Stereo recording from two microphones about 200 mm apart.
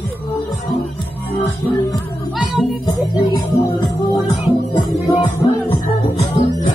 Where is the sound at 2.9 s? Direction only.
20° left (ahead or behind).